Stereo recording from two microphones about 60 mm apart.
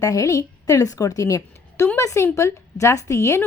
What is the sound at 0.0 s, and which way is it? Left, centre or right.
A woman's voice, left.